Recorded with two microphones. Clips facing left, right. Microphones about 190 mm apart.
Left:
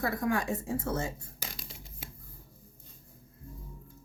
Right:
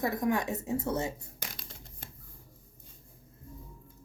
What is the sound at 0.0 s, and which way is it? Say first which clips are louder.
A woman's voice: right 1 dB; 20° right (ahead or behind).